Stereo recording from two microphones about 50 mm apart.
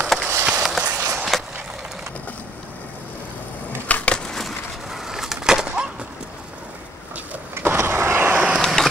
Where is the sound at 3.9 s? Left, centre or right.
Left.